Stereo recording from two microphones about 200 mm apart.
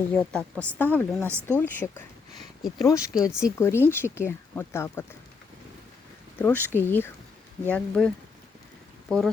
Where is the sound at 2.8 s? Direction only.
15° left (ahead or behind).